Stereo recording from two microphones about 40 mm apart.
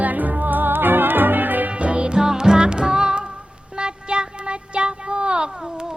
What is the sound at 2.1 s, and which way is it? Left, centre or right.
Music, centre.